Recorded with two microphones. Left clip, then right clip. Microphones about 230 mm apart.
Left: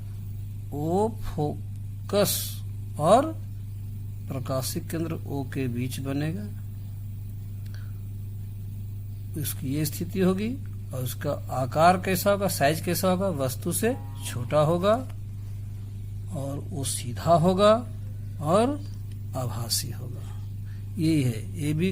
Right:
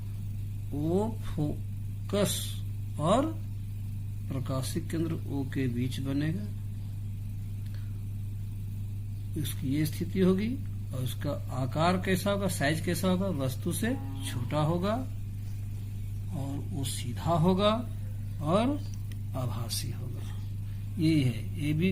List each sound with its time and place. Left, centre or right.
0.9 s a man's voice: left
4.3 s a man's voice: left
9.4 s a man's voice: left
16.9 s a man's voice: left
21.0 s a man's voice: left